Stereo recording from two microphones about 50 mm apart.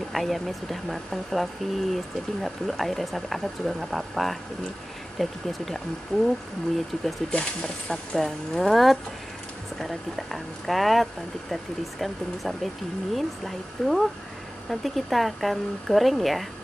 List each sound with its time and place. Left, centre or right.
0.1 s speech: centre
7.2 s speech: centre
8.2 s speech: centre